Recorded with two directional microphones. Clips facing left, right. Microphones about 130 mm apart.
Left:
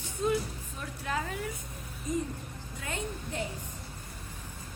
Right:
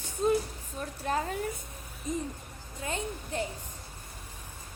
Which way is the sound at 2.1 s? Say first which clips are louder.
Left 1 dB; 25° right (ahead or behind).